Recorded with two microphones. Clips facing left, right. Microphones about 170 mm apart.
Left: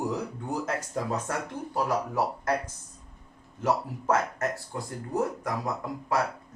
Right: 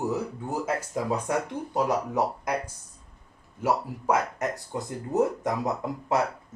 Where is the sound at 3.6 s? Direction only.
10° right (ahead or behind).